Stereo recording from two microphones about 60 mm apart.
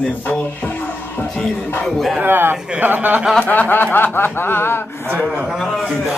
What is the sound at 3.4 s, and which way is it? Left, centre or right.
Speech, left.